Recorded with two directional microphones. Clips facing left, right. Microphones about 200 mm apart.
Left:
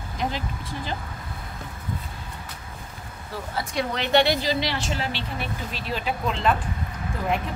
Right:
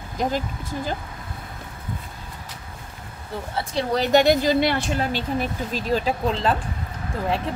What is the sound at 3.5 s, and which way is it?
A woman's voice, 35° right (ahead or behind).